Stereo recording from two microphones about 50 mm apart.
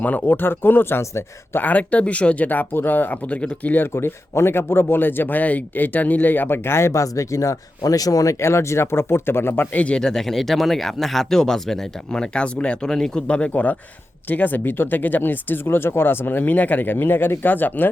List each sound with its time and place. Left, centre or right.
0.0 s speech: left
1.6 s speech: left
3.2 s speech: left
3.9 s speech: left
6.7 s speech: left
8.3 s speech: left
9.7 s speech: left
10.0 s speech: centre
12.8 s speech: centre
13.2 s speech: left